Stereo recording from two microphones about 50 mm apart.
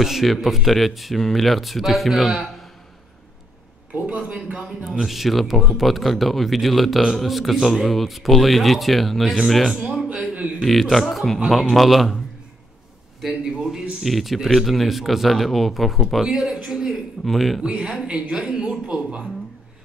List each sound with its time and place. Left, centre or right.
0.0 s speech: centre
3.9 s a man's voice: right
5.0 s speech: centre
10.0 s a sound: right
10.6 s speech: centre
13.2 s a man's voice: centre
14.0 s a man's voice: centre
17.2 s speech: centre
17.6 s a man's voice: centre